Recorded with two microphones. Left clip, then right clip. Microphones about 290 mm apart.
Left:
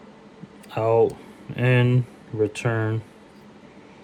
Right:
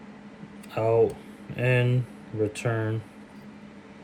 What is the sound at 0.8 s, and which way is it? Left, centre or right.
Speech, left.